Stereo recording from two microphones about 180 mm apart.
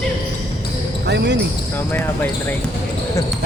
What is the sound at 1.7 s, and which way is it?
Speech, 10° left (ahead or behind).